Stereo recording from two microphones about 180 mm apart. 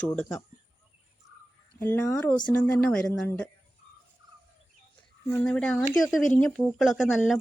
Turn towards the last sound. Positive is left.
turn(degrees=0)  # may be behind; listen again after turning